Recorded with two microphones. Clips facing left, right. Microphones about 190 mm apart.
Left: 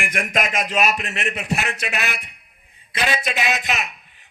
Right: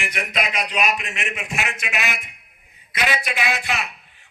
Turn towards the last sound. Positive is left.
turn(degrees=15)  # may be behind; listen again after turning